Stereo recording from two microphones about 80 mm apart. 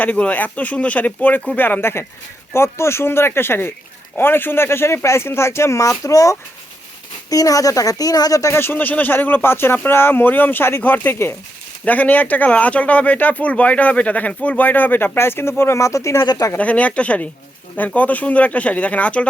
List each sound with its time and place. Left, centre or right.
0.0 s speech: centre; by 16.2 s left
16.2 s speech: left
16.6 s speech: centre